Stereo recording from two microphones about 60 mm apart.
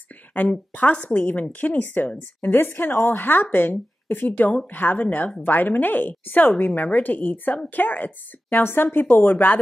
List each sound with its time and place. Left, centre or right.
0.3 s a woman's voice: left